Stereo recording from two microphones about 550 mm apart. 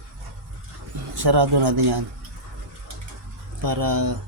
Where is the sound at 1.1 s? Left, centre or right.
Right.